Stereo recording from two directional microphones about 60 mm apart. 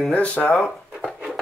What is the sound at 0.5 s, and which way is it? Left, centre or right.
Drawer open or close, centre.